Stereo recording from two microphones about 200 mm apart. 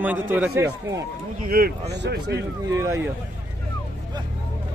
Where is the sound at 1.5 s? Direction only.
50° right (ahead or behind).